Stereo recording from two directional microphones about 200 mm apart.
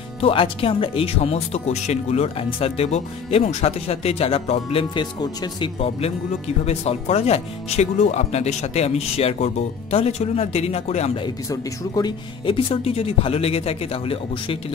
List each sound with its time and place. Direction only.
0.2 s speech: 25° left (ahead or behind)
11.5 s speech: 20° left (ahead or behind)